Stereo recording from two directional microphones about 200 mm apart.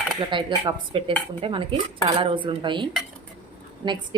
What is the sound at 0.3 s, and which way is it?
A woman's voice, 25° right (ahead or behind).